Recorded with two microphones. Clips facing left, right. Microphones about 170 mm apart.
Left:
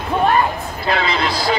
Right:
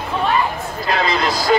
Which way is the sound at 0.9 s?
40° right (ahead or behind).